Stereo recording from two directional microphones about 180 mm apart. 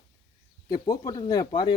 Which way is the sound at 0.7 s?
20° left (ahead or behind).